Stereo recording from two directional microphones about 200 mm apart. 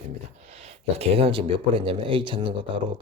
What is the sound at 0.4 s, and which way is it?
Speech, 30° right (ahead or behind).